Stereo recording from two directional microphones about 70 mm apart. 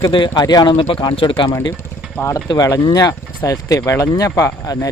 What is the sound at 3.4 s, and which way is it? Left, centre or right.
Speech, left.